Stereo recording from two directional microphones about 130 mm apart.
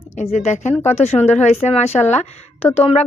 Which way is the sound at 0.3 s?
65° left (ahead or behind).